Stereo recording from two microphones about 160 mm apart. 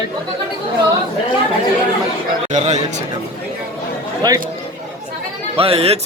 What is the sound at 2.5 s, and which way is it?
Speech, 45° right (ahead or behind).